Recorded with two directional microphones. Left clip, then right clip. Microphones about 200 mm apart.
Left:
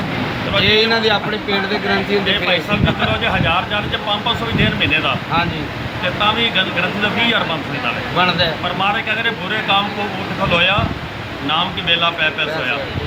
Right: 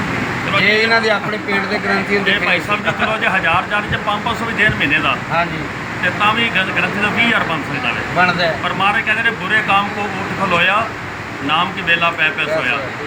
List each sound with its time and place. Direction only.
0.6 s speech: 20° right (ahead or behind)
3.1 s speech: 15° left (ahead or behind)
6.1 s speech: 15° left (ahead or behind)
8.6 s speech: 15° left (ahead or behind)